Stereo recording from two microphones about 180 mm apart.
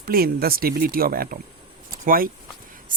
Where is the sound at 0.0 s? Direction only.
55° right (ahead or behind).